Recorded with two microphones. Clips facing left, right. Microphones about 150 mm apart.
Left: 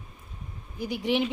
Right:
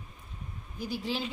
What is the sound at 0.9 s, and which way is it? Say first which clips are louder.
Speech: left 7 dB; 20° left (ahead or behind).